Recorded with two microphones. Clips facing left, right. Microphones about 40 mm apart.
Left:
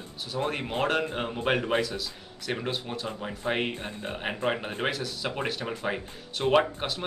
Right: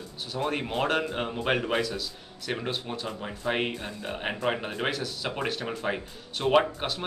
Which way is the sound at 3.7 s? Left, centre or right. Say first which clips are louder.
Even; left.